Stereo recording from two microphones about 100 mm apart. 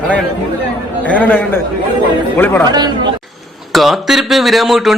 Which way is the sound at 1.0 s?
15° left (ahead or behind).